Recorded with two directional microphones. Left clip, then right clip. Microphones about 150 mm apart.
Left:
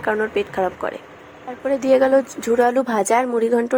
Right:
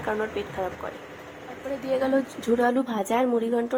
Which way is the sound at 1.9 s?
45° left (ahead or behind).